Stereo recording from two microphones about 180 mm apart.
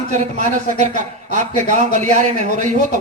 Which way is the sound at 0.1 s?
40° right (ahead or behind).